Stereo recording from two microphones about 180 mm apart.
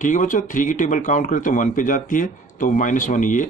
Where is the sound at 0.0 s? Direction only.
45° left (ahead or behind).